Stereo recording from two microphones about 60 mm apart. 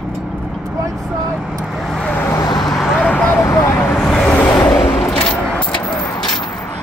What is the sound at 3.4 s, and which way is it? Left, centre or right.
Vehicle, left.